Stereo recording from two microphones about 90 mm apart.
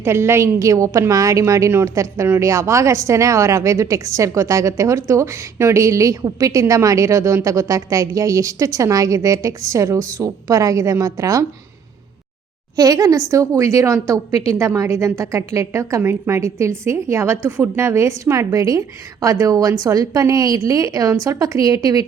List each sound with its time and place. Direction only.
0.0 s a woman's voice: 30° right (ahead or behind)
12.7 s a woman's voice: 40° right (ahead or behind)